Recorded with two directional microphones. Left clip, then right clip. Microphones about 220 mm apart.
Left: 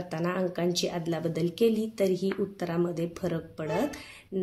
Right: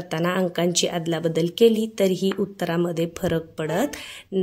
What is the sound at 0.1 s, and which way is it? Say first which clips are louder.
A woman's voice: right 7 dB; 35° right (ahead or behind).